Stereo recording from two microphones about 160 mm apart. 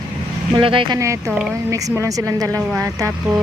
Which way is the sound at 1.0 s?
20° right (ahead or behind).